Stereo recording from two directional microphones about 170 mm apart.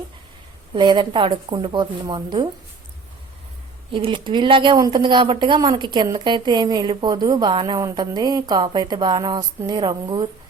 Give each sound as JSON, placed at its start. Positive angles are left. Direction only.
{"t": 0.7, "sound": "a woman's voice", "side_deg": -30}
{"t": 3.9, "sound": "a woman's voice", "side_deg": -30}